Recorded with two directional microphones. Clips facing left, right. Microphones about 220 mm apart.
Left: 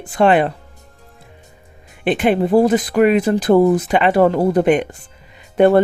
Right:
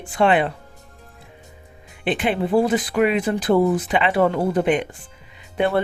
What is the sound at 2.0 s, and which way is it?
Speech, 45° left (ahead or behind).